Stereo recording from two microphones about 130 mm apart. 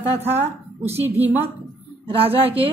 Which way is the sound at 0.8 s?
15° right (ahead or behind).